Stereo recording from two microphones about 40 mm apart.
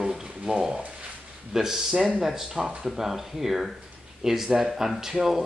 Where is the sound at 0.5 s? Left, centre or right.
Centre.